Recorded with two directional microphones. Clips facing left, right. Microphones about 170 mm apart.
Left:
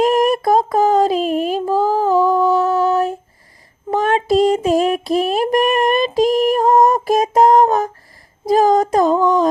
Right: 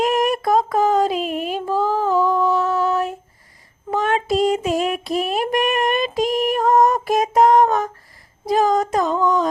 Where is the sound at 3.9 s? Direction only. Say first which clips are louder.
Left 4 dB; 35° left (ahead or behind).